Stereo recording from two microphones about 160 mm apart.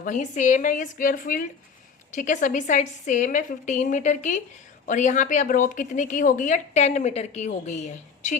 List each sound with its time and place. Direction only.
0.0 s a woman's voice: 50° left (ahead or behind)